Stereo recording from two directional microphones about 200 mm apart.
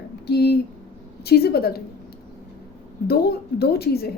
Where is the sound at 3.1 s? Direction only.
50° left (ahead or behind).